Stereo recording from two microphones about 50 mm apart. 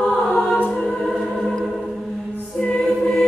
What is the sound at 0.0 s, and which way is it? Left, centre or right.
Choir, centre.